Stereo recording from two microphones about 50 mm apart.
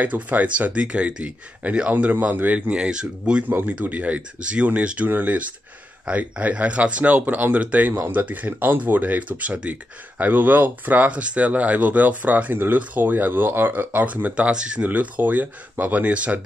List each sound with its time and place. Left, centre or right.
0.0 s speech: right
2.8 s speech: centre
3.4 s speech: right
14.5 s speech: centre
14.8 s speech: right